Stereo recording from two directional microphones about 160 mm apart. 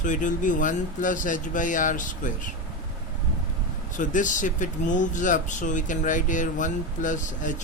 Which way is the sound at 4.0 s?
50° left (ahead or behind).